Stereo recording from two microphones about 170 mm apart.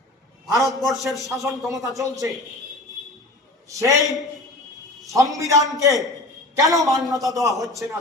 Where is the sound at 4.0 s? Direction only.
Centre (ahead or behind).